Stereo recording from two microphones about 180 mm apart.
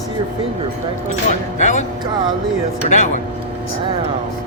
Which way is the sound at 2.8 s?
40° left (ahead or behind).